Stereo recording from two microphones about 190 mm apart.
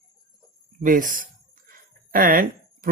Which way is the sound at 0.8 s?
45° right (ahead or behind).